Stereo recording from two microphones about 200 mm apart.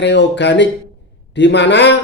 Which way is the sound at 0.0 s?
60° left (ahead or behind).